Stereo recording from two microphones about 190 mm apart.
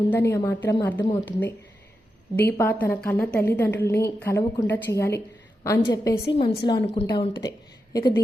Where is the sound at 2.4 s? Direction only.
10° left (ahead or behind); by 7.3 s 30° left (ahead or behind).